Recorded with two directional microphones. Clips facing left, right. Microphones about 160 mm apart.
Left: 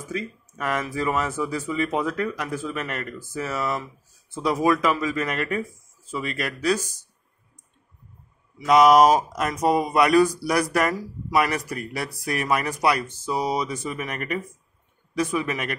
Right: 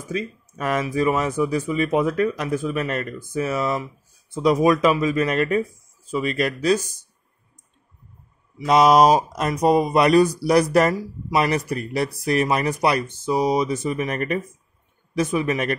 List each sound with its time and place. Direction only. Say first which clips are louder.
0.1 s speech: right 4 dB; 20° right (ahead or behind)
8.6 s speech: right 1 dB; 25° right (ahead or behind)